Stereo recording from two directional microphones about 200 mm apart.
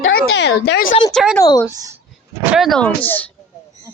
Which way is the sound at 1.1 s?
Centre (ahead or behind).